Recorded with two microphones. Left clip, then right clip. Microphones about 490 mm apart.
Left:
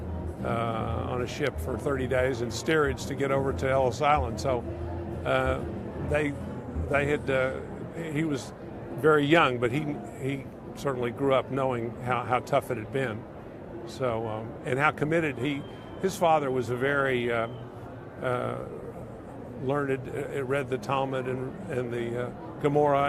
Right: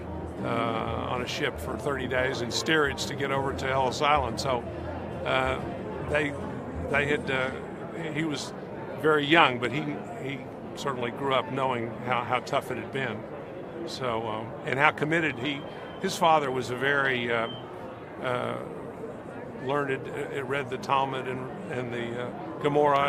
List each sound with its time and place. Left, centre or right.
0.4 s a man's voice: left
10.8 s speech: left
19.6 s speech: left